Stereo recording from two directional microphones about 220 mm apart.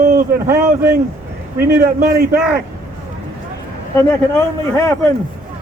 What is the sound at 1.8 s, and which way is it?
Speech, 40° right (ahead or behind).